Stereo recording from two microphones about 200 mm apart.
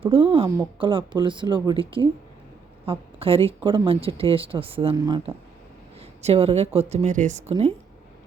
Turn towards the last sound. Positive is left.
turn(degrees=-30)  # may be behind; listen again after turning